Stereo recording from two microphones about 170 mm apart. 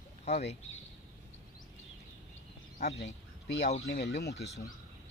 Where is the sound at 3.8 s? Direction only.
70° left (ahead or behind).